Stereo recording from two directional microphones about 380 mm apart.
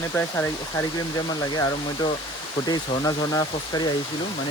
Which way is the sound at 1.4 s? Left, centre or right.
Centre.